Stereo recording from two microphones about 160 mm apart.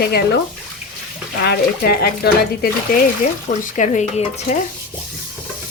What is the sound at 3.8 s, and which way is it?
Stir, 50° left (ahead or behind).